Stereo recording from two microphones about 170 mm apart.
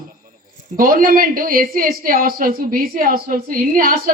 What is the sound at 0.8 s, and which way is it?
A woman's voice, 55° right (ahead or behind).